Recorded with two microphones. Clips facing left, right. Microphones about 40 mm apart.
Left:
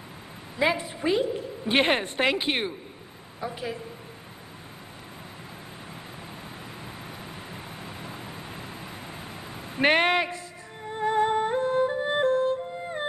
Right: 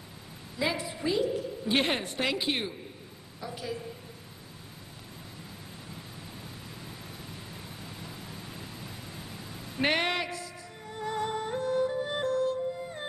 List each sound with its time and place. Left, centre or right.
0.6 s a woman's voice: left
7.8 s vehicle: left
10.9 s music: left